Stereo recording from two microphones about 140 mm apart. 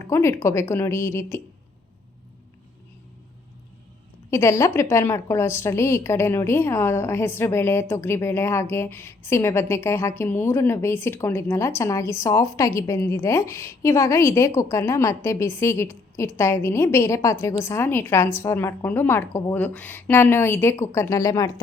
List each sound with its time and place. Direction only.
0.1 s a woman's voice: 20° left (ahead or behind)
4.3 s a woman's voice: 20° left (ahead or behind)